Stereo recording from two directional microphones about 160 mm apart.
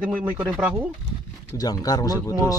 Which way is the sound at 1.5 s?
25° left (ahead or behind).